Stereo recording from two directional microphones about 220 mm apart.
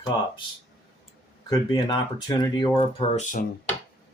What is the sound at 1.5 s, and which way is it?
Speech, 20° left (ahead or behind).